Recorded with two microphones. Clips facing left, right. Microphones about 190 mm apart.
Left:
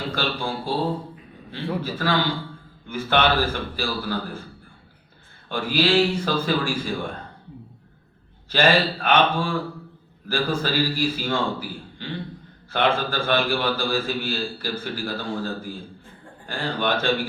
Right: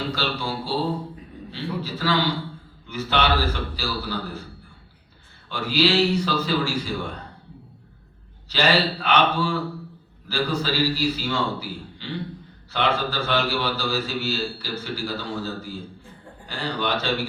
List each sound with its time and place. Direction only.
0.1 s a man's voice: 50° left (ahead or behind)
5.5 s a man's voice: 50° left (ahead or behind)
8.4 s a man's voice: 50° left (ahead or behind)